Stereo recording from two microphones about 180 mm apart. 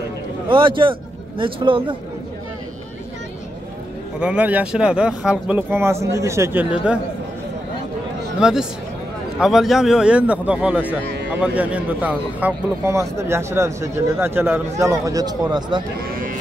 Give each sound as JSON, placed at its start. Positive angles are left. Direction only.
{"t": 0.5, "sound": "speech", "side_deg": -30}
{"t": 4.2, "sound": "a man's voice", "side_deg": -5}
{"t": 8.4, "sound": "a man's voice", "side_deg": -5}